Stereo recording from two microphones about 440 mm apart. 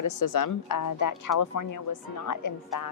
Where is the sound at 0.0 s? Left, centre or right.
Left.